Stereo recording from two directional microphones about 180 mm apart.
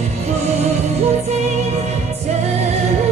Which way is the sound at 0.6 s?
35° right (ahead or behind).